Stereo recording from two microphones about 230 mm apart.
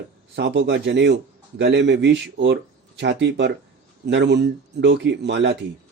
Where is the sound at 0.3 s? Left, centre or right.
Right.